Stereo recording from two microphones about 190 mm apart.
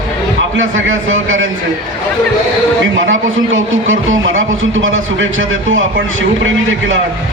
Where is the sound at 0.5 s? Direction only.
90° right.